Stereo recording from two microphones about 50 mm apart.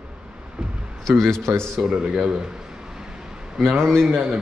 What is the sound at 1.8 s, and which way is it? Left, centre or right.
Speech, centre.